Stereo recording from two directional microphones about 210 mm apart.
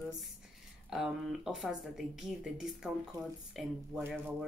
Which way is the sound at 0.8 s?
Centre (ahead or behind).